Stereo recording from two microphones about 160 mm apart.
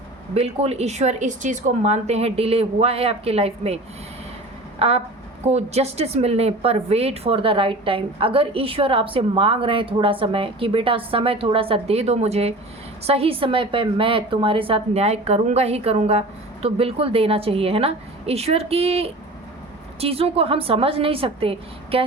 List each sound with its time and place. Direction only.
0.3 s a woman's voice: 40° right (ahead or behind)
4.8 s a woman's voice: 40° right (ahead or behind)